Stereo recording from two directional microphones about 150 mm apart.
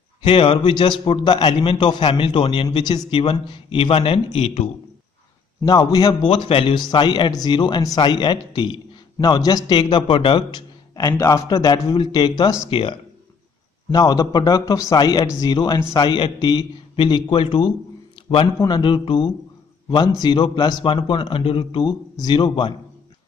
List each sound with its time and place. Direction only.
0.2 s a man's voice: 35° left (ahead or behind)
5.6 s a man's voice: 25° left (ahead or behind)
6.3 s a man's voice: 35° left (ahead or behind)
11.0 s a man's voice: 25° left (ahead or behind)